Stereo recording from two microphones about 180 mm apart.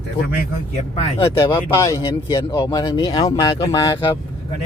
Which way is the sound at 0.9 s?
35° left (ahead or behind).